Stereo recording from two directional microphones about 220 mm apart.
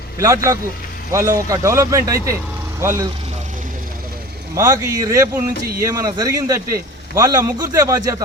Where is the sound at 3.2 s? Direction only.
30° right (ahead or behind).